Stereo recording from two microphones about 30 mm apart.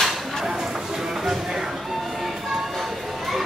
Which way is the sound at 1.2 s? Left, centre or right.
Centre.